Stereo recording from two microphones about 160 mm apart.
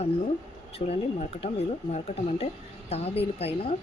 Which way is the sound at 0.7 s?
40° left (ahead or behind).